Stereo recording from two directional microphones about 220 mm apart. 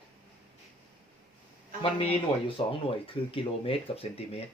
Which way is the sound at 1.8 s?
25° left (ahead or behind).